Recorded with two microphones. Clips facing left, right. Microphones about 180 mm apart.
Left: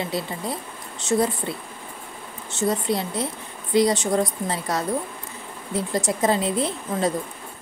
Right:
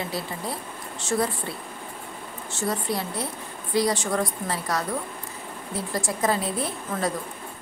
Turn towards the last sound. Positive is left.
turn(degrees=20)  # may be behind; listen again after turning